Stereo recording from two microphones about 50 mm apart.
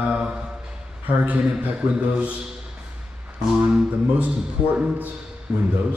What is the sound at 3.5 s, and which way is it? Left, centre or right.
A man's voice, right.